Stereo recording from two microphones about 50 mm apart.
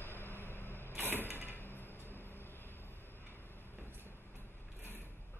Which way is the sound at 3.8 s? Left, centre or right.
Right.